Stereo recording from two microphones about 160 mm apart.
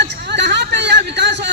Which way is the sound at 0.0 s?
90° right.